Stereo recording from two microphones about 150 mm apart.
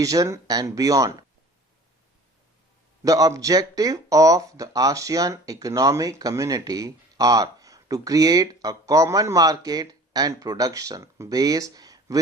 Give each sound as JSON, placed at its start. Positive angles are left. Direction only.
{"t": 0.0, "sound": "speech", "side_deg": -20}
{"t": 3.0, "sound": "speech", "side_deg": -25}